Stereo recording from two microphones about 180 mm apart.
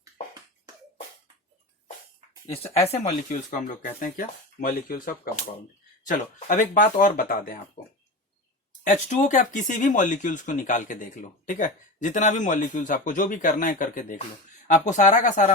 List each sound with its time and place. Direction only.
2.8 s speech: 35° left (ahead or behind); by 7.6 s 50° left (ahead or behind)
8.8 s speech: 40° left (ahead or behind)